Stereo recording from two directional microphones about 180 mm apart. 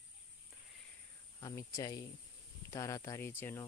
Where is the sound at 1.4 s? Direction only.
20° left (ahead or behind).